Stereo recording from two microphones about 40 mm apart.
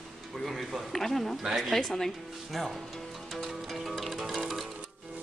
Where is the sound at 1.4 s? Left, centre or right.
Centre.